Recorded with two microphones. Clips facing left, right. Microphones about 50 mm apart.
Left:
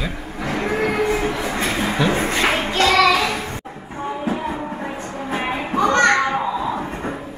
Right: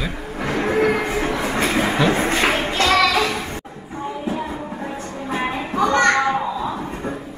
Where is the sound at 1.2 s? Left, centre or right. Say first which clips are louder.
Right 1 dB; centre.